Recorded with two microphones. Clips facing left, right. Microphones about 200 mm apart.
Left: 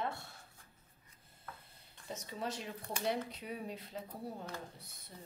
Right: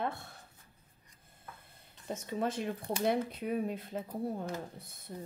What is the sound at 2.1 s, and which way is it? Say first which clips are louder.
A woman's voice: right 7 dB; 55° right (ahead or behind).